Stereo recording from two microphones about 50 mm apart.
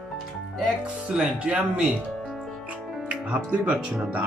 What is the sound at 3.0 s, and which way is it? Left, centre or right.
Speech, right.